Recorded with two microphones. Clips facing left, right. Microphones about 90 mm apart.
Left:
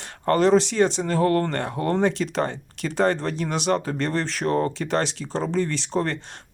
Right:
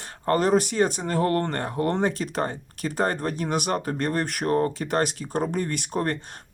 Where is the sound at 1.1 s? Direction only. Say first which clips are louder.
Left 3 dB; 35° right (ahead or behind).